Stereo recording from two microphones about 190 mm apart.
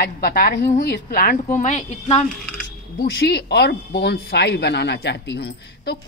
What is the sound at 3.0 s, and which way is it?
Speech, 60° left (ahead or behind).